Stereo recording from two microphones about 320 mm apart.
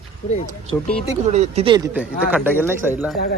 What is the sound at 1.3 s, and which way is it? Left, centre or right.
Speech, right.